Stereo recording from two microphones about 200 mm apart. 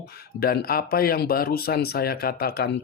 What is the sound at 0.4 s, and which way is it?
Speech, 50° left (ahead or behind).